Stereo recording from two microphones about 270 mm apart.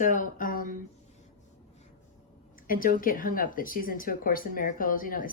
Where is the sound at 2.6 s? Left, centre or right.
Left.